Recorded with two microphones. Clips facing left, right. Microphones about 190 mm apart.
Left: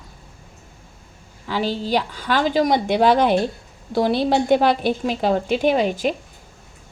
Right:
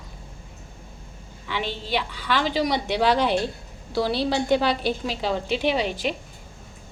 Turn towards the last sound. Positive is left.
turn(degrees=45)  # may be behind; listen again after turning